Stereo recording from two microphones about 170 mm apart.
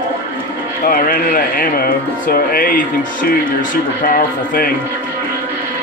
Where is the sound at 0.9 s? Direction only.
55° left (ahead or behind).